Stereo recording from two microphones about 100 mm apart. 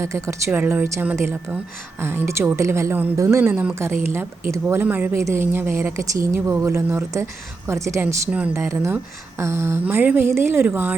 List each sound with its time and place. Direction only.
0.0 s a woman's voice: 30° right (ahead or behind)
3.5 s speech: 15° right (ahead or behind)
3.8 s a woman's voice: 25° right (ahead or behind)
8.0 s speech: 10° right (ahead or behind)
8.5 s a woman's voice: 30° right (ahead or behind)